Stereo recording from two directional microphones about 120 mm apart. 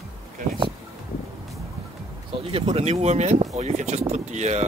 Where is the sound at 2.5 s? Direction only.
60° right (ahead or behind).